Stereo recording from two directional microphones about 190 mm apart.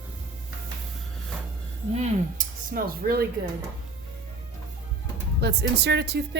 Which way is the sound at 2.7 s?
50° right (ahead or behind).